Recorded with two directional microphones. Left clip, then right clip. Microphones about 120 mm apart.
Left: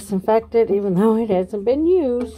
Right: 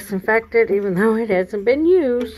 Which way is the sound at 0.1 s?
30° left (ahead or behind).